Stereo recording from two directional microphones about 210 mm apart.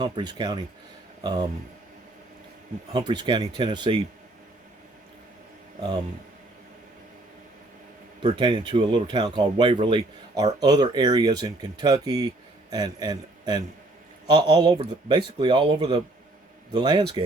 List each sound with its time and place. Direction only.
0.0 s speech: 20° right (ahead or behind)
2.9 s speech: 20° right (ahead or behind)
8.2 s a man's voice: 20° right (ahead or behind)